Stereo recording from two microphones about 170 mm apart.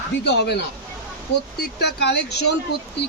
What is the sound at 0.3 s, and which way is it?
Speech, 80° left.